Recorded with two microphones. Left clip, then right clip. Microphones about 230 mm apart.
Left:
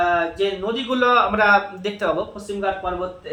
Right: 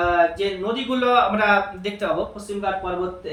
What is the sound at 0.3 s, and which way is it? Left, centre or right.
A man's voice, centre.